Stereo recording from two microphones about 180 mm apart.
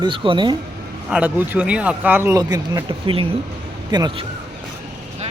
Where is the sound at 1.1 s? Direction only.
10° right (ahead or behind); by 4.2 s 25° right (ahead or behind).